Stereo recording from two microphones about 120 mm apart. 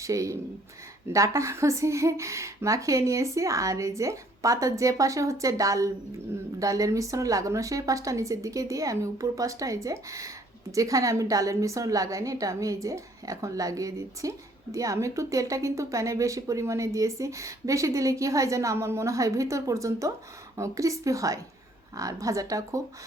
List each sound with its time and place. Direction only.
0.0 s a woman's voice: 25° right (ahead or behind)